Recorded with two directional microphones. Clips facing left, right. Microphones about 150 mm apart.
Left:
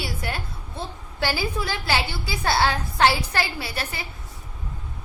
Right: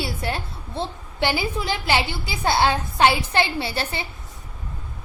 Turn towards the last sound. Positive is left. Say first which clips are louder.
# right 5 dB
turn(degrees=-25)  # may be behind; listen again after turning